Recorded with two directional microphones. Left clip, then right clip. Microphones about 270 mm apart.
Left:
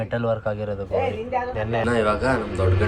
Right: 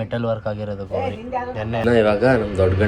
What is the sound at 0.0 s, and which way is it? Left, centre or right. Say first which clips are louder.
Speech: even; right.